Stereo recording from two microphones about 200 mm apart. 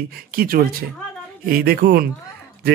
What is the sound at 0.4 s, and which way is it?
A man's voice, 50° right (ahead or behind).